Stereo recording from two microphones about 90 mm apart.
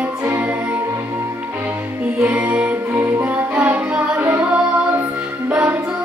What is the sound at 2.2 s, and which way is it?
Music, 10° right (ahead or behind).